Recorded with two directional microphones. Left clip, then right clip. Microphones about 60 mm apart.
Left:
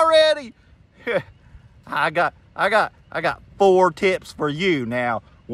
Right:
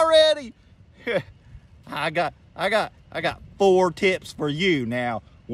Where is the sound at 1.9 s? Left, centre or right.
Right.